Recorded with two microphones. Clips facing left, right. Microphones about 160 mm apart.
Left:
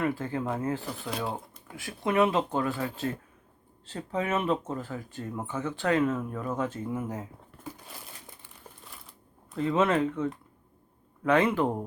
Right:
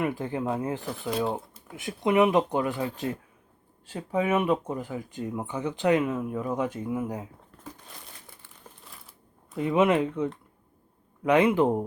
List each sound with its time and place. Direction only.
0.0 s speech: 15° right (ahead or behind)
1.7 s speech: 20° right (ahead or behind)
8.9 s a sound: centre (ahead or behind)
9.6 s speech: 15° right (ahead or behind)